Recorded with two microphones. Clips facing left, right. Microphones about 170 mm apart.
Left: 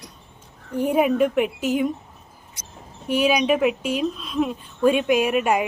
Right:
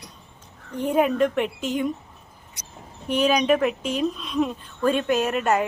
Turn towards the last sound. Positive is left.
turn(degrees=10)  # may be behind; listen again after turning